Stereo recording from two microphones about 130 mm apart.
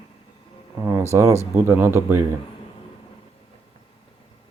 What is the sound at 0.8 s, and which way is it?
Speech, 20° right (ahead or behind).